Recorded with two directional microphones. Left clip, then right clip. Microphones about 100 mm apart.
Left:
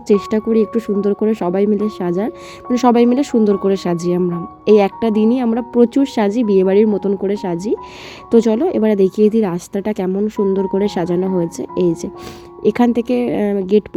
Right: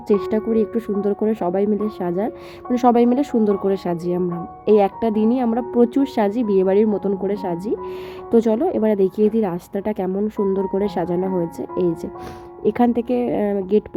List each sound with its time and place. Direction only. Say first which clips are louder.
0.1 s speech: left 4 dB; 30° left (ahead or behind)
3.8 s a woman's voice: left 4 dB; 40° left (ahead or behind)
10.2 s a woman's voice: left 5 dB; 20° left (ahead or behind)